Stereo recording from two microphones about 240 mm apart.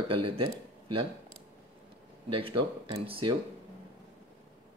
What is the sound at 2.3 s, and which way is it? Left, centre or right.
Speech, right.